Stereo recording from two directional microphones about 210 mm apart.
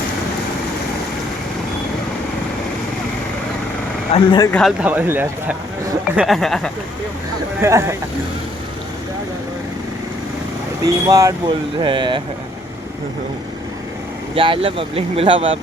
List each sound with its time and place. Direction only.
4.1 s speech: 20° left (ahead or behind)
4.5 s speech: 5° right (ahead or behind)
6.1 s speech: centre (ahead or behind)
7.6 s speech: 15° right (ahead or behind)
10.8 s speech: 15° right (ahead or behind)
14.3 s speech: 25° right (ahead or behind)